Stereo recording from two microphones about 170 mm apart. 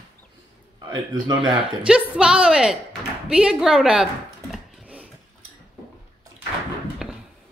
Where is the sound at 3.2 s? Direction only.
5° right (ahead or behind).